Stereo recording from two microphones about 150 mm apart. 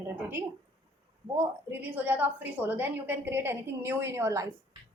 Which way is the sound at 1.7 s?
10° right (ahead or behind).